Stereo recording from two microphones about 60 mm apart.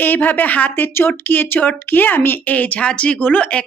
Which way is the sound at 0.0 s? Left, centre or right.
Left.